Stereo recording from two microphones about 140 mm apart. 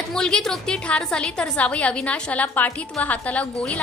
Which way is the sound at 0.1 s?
5° left (ahead or behind).